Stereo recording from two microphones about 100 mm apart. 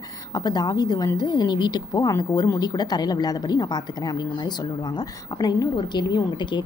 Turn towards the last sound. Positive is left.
turn(degrees=50)  # may be behind; listen again after turning